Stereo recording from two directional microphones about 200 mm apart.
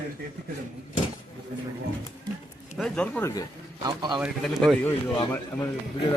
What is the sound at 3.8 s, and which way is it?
Speech, 20° right (ahead or behind).